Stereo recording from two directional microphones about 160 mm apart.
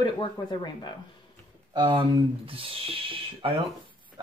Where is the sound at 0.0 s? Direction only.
25° left (ahead or behind).